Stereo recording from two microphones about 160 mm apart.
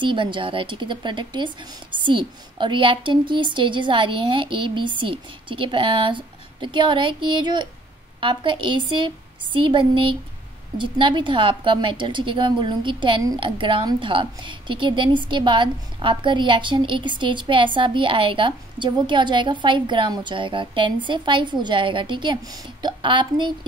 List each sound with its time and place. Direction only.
0.0 s a woman's voice: 30° right (ahead or behind)